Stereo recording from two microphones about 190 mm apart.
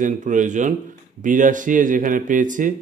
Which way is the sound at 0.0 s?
40° right (ahead or behind).